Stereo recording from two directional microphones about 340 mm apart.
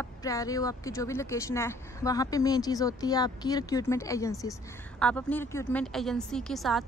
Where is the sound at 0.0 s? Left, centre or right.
Centre.